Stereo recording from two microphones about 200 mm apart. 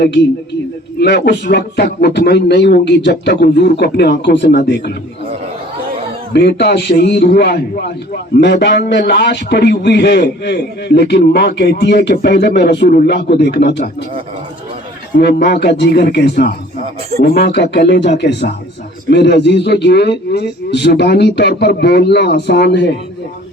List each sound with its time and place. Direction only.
0.0 s a man's voice: 60° left (ahead or behind)
6.3 s a man's voice: 55° left (ahead or behind)
15.1 s a man's voice: 55° left (ahead or behind)